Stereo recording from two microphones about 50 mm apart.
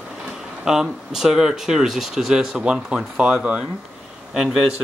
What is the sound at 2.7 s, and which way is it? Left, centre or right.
Speech, centre.